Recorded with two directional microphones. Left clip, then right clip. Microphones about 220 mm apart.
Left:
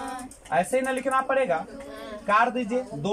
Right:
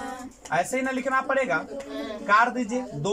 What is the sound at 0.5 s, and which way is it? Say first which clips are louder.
A woman's voice: left 2 dB; 10° left (ahead or behind).